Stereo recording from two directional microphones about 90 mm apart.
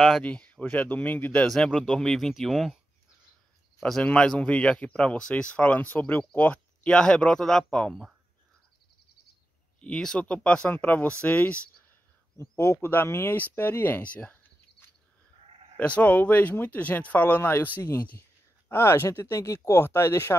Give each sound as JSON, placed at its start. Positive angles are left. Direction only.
{"t": 0.2, "sound": "a man's voice", "side_deg": 15}
{"t": 1.5, "sound": "speech", "side_deg": 5}
{"t": 3.8, "sound": "a man's voice", "side_deg": 10}
{"t": 9.8, "sound": "a man's voice", "side_deg": 10}
{"t": 12.4, "sound": "speech", "side_deg": 30}
{"t": 15.8, "sound": "speech", "side_deg": 15}